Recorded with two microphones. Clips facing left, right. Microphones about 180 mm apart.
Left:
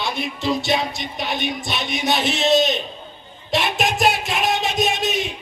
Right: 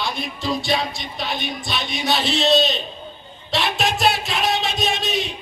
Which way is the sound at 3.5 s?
20° left (ahead or behind).